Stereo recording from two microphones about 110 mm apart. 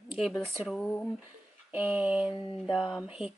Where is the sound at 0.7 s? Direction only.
10° left (ahead or behind).